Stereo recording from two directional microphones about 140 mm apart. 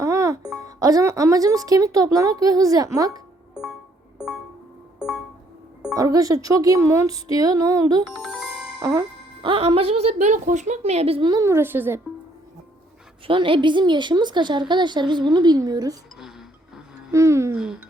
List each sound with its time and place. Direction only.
0.0 s music: 20° right (ahead or behind)
0.6 s speech: 25° right (ahead or behind)
3.5 s music: 5° right (ahead or behind)
4.9 s music: 5° right (ahead or behind)
5.9 s speech: 25° right (ahead or behind)
9.4 s a woman's voice: 40° right (ahead or behind)
11.2 s speech: 25° right (ahead or behind)
13.2 s a woman's voice: 40° right (ahead or behind)
17.1 s speech: 20° right (ahead or behind)
17.5 s speech: 5° right (ahead or behind)